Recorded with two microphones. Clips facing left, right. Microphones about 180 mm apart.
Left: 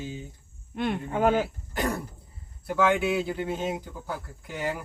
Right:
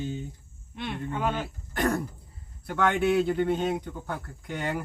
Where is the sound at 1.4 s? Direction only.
10° left (ahead or behind).